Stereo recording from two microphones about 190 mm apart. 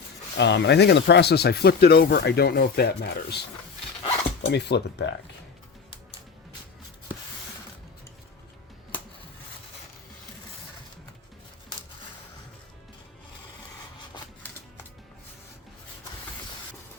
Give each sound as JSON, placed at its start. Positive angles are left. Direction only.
{"t": 0.3, "sound": "speech", "side_deg": 65}
{"t": 4.4, "sound": "speech", "side_deg": 65}